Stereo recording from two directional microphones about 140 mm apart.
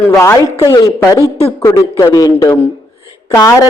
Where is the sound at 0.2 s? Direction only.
20° left (ahead or behind).